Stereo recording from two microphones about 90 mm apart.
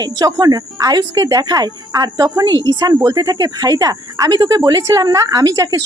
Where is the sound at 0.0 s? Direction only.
45° right (ahead or behind).